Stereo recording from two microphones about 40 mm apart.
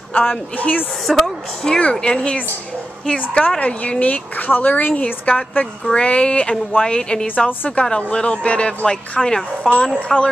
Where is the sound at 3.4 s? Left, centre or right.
Left.